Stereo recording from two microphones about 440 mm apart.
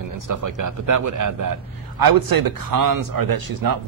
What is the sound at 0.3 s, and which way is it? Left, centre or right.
Speech, right.